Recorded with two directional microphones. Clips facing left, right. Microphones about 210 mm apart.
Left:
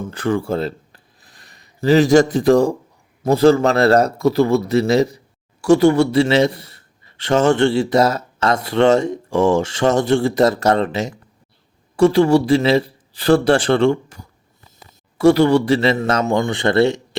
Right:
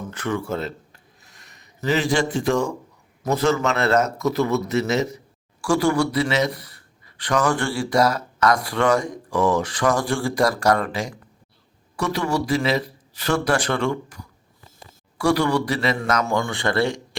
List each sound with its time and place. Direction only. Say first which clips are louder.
0.0 s a man's voice: left 6 dB; 30° left (ahead or behind)